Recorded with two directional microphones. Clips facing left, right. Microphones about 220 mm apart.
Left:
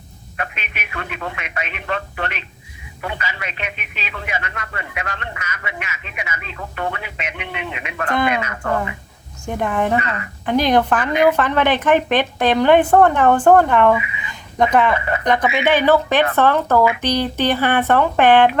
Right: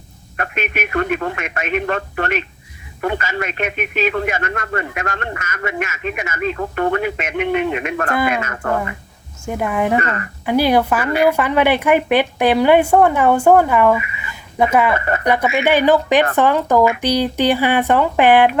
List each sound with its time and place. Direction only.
0.3 s a man's voice: 50° right (ahead or behind)
8.1 s speech: 5° right (ahead or behind)
9.5 s speech: 10° right (ahead or behind)
14.3 s a sound: 5° right (ahead or behind)
14.9 s a man's voice: 50° right (ahead or behind)
15.2 s speech: 10° right (ahead or behind)